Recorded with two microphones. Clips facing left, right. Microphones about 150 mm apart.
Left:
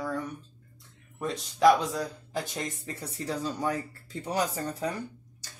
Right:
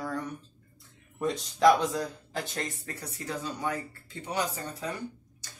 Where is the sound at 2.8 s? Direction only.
30° left (ahead or behind).